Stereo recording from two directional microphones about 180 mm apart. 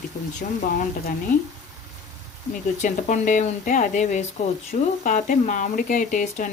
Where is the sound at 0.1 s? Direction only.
55° left (ahead or behind).